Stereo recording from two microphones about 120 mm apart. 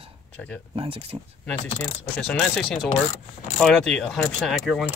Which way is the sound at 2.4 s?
5° left (ahead or behind).